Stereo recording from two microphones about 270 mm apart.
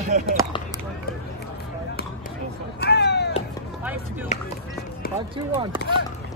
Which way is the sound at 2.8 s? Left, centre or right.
Left.